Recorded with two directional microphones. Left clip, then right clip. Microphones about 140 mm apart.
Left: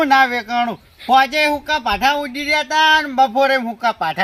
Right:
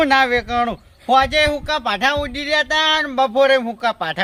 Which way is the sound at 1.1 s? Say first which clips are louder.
Left 2 dB; 5° left (ahead or behind).